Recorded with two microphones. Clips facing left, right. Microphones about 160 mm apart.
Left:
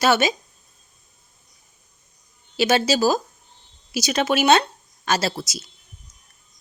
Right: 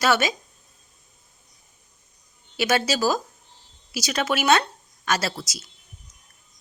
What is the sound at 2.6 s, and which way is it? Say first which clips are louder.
Speech: left 4 dB; 25° left (ahead or behind).